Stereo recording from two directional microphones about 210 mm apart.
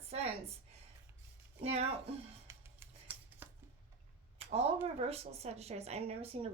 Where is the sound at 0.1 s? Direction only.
30° right (ahead or behind).